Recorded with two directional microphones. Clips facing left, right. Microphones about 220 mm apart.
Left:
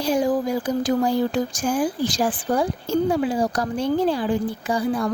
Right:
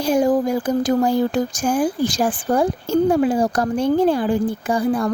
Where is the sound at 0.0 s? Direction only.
50° right (ahead or behind).